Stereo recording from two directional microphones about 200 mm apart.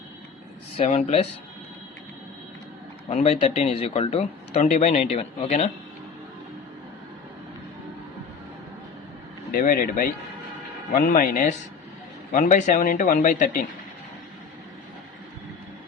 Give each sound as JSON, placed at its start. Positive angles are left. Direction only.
{"t": 0.8, "sound": "speech", "side_deg": 35}
{"t": 3.1, "sound": "speech", "side_deg": 35}
{"t": 9.5, "sound": "speech", "side_deg": 45}